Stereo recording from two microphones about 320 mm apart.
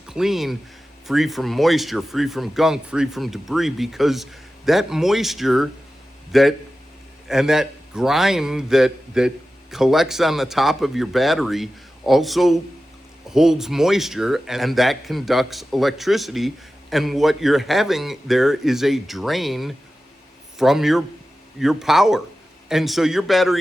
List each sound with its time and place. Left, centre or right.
0.1 s a man's voice: centre